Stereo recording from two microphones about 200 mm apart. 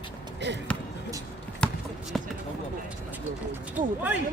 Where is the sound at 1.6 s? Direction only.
5° left (ahead or behind).